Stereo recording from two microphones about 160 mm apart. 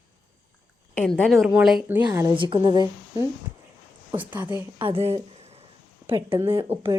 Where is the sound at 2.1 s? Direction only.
15° right (ahead or behind).